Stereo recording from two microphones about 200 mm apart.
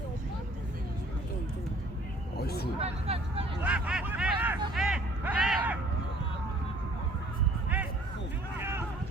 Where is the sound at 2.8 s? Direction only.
30° right (ahead or behind).